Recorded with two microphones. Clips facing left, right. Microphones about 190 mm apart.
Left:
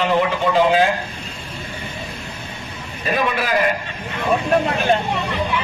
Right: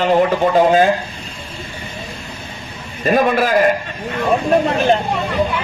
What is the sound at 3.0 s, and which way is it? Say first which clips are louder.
A man's voice: right 7 dB; 45° right (ahead or behind).